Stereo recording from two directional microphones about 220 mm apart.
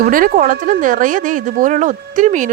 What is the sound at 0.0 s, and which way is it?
Speech, 40° right (ahead or behind).